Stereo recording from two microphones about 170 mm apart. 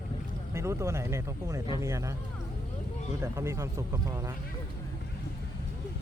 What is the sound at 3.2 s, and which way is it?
Speech, 15° right (ahead or behind).